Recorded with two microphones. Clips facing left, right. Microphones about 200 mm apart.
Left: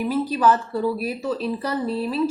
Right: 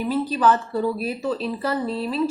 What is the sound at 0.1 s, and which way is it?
A woman's voice, 10° left (ahead or behind).